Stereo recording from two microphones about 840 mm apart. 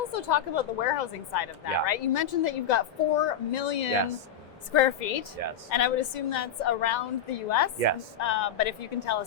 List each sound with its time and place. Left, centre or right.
0.1 s a woman's voice: left
7.8 s a woman's voice: right
8.2 s speech: left